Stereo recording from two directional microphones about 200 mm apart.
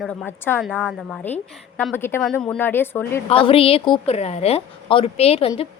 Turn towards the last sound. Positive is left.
turn(degrees=30)  # may be behind; listen again after turning